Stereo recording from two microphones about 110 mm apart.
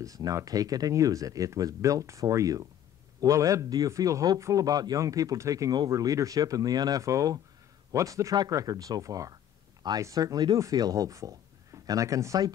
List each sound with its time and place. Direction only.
0.0 s speech: 30° right (ahead or behind)